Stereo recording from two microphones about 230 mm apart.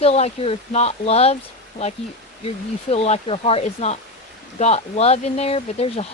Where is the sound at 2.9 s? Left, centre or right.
Left.